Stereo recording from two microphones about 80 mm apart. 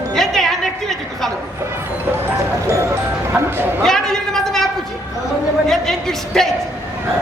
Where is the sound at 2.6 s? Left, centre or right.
Right.